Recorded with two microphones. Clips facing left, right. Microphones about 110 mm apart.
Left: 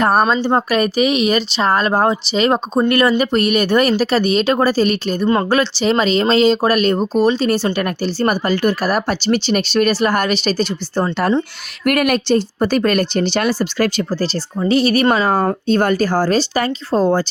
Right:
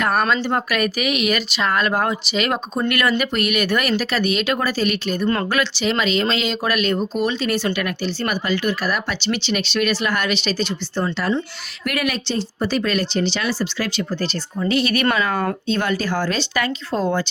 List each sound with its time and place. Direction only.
0.0 s speech: 30° left (ahead or behind)
11.9 s speech: 50° left (ahead or behind); by 17.2 s 35° left (ahead or behind)